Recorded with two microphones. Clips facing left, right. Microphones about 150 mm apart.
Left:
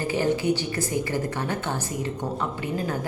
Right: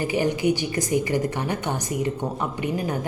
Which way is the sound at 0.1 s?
15° right (ahead or behind).